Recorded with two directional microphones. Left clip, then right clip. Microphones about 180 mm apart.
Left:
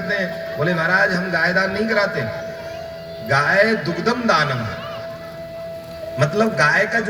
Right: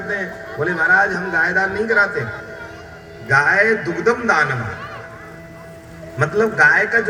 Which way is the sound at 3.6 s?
40° right (ahead or behind).